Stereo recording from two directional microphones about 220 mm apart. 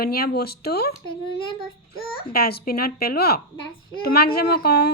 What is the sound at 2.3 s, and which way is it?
Speech, 45° left (ahead or behind).